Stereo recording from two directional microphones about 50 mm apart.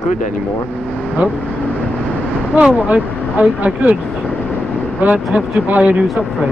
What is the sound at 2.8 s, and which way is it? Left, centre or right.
Speech, right.